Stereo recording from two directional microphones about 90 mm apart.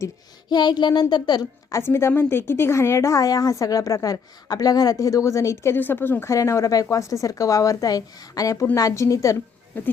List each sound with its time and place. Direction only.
0.5 s a sound: 55° left (ahead or behind)
1.1 s a woman's voice: 50° left (ahead or behind)
1.7 s speech: 30° left (ahead or behind)
5.7 s speech: 25° left (ahead or behind)